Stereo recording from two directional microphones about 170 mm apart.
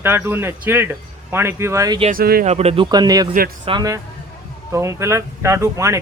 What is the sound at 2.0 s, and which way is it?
Speech, 60° right (ahead or behind).